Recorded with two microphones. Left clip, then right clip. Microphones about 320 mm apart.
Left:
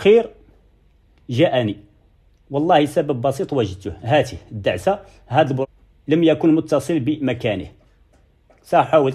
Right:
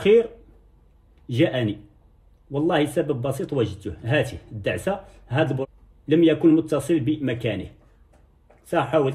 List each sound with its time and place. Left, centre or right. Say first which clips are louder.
0.0 s speech: left 3 dB; left
8.6 s speech: left 6 dB; left